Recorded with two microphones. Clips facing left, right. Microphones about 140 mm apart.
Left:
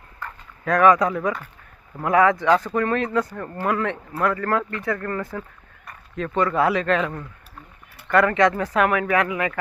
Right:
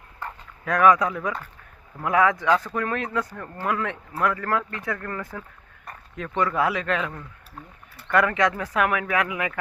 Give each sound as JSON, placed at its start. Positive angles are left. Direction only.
{"t": 0.6, "sound": "speech", "side_deg": -5}
{"t": 8.1, "sound": "speech", "side_deg": -5}